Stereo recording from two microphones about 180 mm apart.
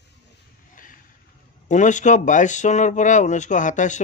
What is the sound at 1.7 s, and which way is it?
Speech, 45° left (ahead or behind).